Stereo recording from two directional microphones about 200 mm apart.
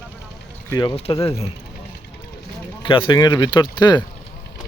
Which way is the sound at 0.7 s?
20° left (ahead or behind).